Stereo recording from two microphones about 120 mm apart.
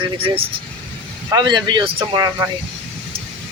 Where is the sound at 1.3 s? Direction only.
40° right (ahead or behind).